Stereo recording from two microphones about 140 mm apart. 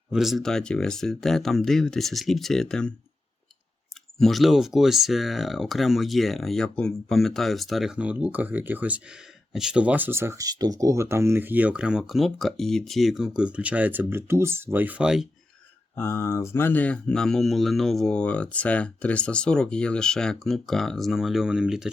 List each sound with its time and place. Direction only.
0.1 s speech: centre (ahead or behind)
4.2 s speech: centre (ahead or behind)
16.0 s speech: 20° left (ahead or behind); by 21.9 s 5° right (ahead or behind)